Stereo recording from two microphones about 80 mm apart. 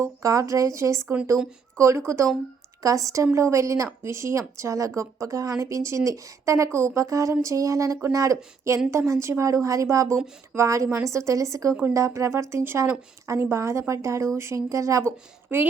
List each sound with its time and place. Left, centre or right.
0.0 s speech: right
15.4 s a woman's voice: right